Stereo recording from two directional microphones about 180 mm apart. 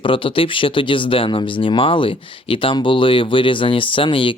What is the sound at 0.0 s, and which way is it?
Speech, 30° left (ahead or behind).